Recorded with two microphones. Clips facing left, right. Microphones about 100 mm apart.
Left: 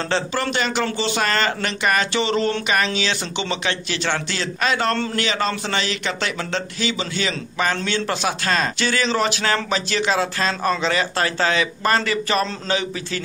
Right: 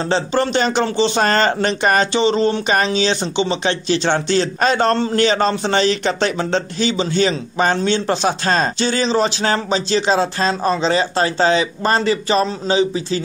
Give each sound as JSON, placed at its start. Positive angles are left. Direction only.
{"t": 0.1, "sound": "speech", "side_deg": -25}
{"t": 2.1, "sound": "a man's voice", "side_deg": -25}
{"t": 2.7, "sound": "a man's voice", "side_deg": -30}